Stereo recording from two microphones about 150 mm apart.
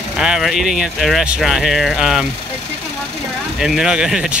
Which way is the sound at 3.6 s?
Centre (ahead or behind).